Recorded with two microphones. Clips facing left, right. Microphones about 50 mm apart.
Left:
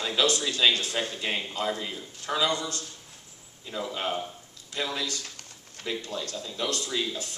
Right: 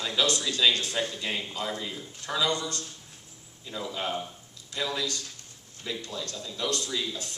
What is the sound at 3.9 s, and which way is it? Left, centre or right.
A man's voice, left.